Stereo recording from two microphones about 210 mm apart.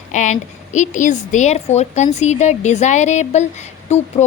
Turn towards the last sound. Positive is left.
turn(degrees=35)  # may be behind; listen again after turning